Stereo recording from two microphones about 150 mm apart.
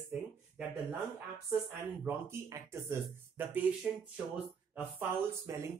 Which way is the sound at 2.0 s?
15° right (ahead or behind).